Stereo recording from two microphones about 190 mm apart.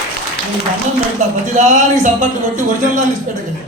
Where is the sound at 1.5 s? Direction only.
40° right (ahead or behind).